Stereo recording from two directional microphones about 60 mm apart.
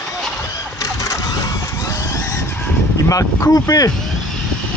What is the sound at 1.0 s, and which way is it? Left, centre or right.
Vehicle, left.